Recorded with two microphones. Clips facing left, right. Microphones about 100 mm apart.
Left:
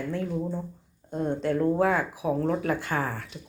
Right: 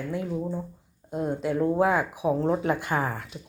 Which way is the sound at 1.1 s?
5° right (ahead or behind).